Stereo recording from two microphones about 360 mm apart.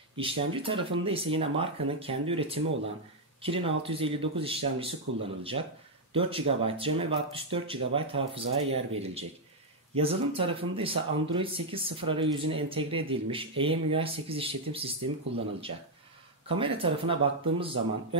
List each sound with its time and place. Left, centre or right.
0.1 s speech: centre
5.1 s speech: right
5.4 s speech: centre
16.4 s speech: centre